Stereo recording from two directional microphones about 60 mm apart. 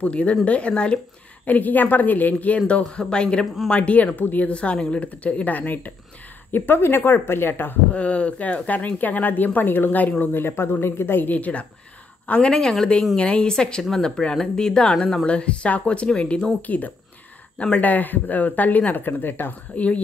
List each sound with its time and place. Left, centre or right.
0.0 s speech: left
7.9 s speech: left
12.3 s speech: centre
16.6 s speech: left
19.7 s speech: left